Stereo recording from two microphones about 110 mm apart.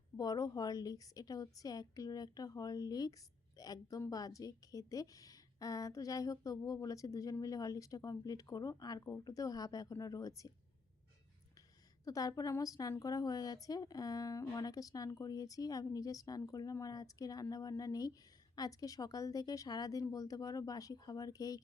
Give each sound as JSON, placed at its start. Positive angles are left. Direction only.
{"t": 0.2, "sound": "speech", "side_deg": 35}
{"t": 12.0, "sound": "speech", "side_deg": 35}